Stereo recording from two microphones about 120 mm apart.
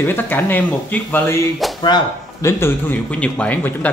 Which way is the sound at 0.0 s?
15° left (ahead or behind).